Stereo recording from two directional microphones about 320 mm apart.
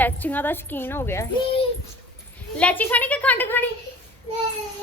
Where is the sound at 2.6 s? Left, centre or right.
Centre.